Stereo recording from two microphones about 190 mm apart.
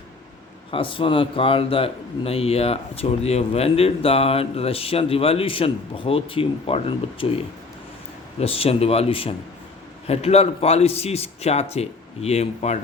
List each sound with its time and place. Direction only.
0.7 s speech: 25° left (ahead or behind)
8.4 s speech: 30° left (ahead or behind)